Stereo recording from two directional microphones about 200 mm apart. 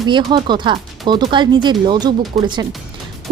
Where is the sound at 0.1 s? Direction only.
25° right (ahead or behind).